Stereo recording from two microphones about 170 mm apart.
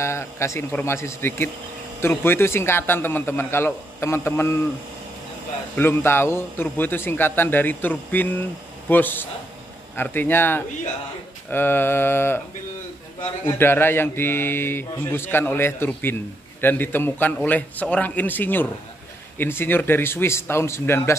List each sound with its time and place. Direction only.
0.0 s a man's voice: 15° left (ahead or behind)
5.8 s a man's voice: 15° left (ahead or behind)
13.5 s a man's voice: 15° left (ahead or behind)